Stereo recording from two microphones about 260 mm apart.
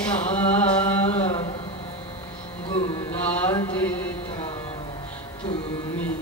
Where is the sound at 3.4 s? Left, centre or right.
Centre.